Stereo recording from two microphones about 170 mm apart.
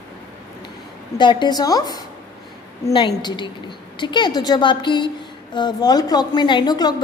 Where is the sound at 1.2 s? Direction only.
25° left (ahead or behind).